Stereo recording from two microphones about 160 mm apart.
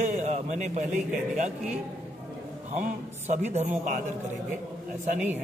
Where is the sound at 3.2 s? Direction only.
45° right (ahead or behind).